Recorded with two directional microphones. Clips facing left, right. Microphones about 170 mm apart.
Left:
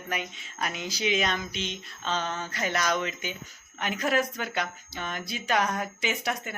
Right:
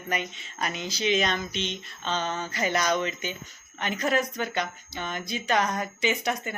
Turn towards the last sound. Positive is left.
turn(degrees=5)  # may be behind; listen again after turning